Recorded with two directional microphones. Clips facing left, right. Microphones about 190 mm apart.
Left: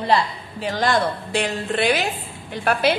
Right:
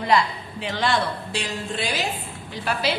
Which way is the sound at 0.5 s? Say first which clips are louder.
Left 3 dB; 40° left (ahead or behind).